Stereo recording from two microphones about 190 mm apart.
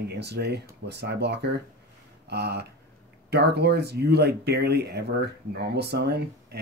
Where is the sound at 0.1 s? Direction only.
60° right (ahead or behind).